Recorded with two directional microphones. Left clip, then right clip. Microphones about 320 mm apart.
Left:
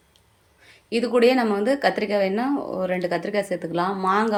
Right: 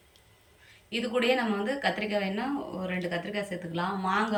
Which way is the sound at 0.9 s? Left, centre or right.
Centre.